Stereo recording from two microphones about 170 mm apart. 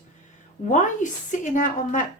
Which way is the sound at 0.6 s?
35° left (ahead or behind).